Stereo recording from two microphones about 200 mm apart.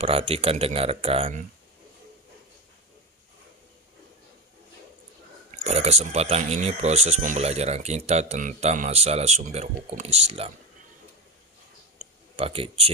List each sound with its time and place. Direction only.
0.0 s speech: 30° right (ahead or behind)
5.6 s speech: 35° right (ahead or behind)
12.4 s speech: 30° right (ahead or behind)